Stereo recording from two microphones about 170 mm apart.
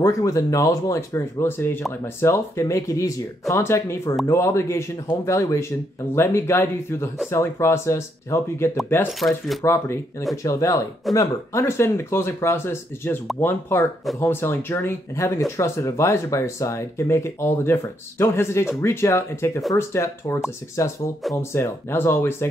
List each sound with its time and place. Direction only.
0.0 s speech: 20° left (ahead or behind)
9.2 s speech: 5° left (ahead or behind)
9.6 s speech: 15° left (ahead or behind)